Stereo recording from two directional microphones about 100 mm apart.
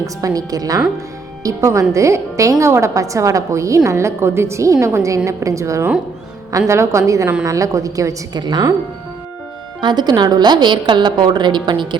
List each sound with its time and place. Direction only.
0.0 s a woman's voice: 35° right (ahead or behind)
9.8 s a woman's voice: 45° right (ahead or behind)